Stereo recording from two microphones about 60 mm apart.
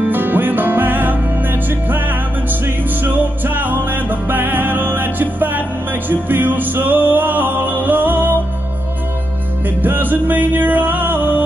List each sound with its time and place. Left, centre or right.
0.0 s music: right
9.8 s music: right